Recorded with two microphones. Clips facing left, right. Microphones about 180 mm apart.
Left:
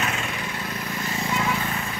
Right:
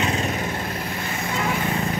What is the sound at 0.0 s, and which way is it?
Vehicle, 35° right (ahead or behind).